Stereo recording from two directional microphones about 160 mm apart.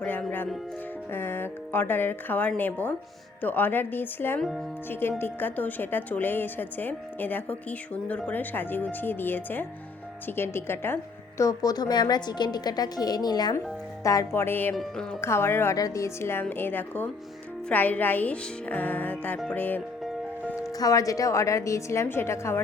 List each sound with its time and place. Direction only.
0.0 s a woman's voice: 10° left (ahead or behind)